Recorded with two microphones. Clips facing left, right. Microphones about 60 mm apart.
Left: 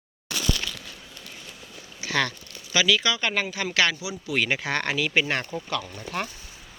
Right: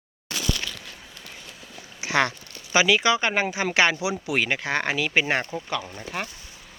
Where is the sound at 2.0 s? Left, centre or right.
Right.